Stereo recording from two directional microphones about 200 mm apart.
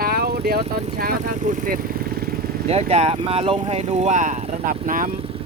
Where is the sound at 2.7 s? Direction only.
30° right (ahead or behind).